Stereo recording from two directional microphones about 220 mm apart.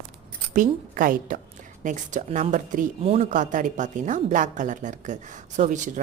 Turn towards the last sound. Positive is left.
turn(degrees=-35)  # may be behind; listen again after turning